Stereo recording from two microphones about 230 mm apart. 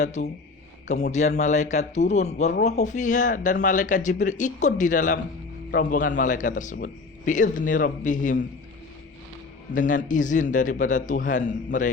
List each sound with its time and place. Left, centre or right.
0.0 s a man's voice: left
9.7 s a man's voice: left